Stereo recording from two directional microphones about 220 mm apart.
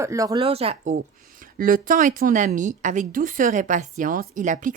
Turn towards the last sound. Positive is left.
turn(degrees=-35)  # may be behind; listen again after turning